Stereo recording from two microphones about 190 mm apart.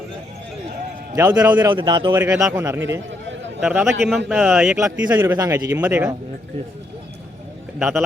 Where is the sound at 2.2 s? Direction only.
10° right (ahead or behind).